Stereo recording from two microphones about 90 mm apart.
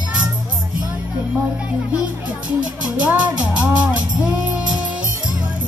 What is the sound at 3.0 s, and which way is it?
Music, 10° right (ahead or behind).